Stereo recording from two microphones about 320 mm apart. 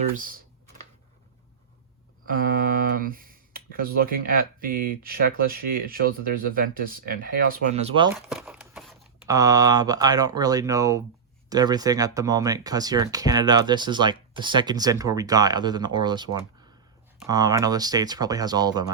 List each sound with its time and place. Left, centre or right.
0.2 s speech: right
2.3 s speech: right
8.3 s a sound: centre
9.2 s speech: centre